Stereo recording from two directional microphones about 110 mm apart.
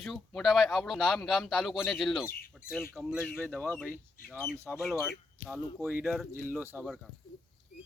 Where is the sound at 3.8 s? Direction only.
20° left (ahead or behind).